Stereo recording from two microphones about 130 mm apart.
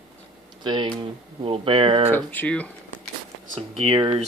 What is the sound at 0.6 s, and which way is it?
Speech, 35° right (ahead or behind).